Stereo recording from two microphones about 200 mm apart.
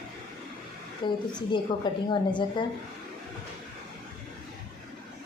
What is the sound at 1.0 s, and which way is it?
Speech, 25° left (ahead or behind).